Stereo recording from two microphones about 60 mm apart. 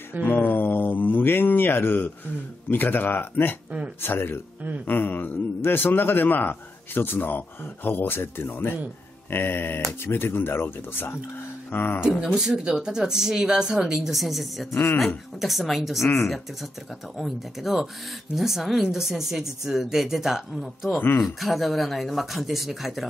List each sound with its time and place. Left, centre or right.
0.2 s a man's voice: left
12.4 s speech: centre
14.7 s a man's voice: left
15.4 s speech: centre
17.2 s speech: centre